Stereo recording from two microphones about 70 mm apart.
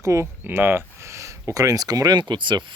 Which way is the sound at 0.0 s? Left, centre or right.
Right.